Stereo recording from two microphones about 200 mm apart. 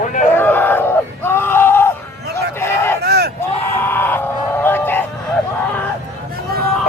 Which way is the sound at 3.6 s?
10° left (ahead or behind).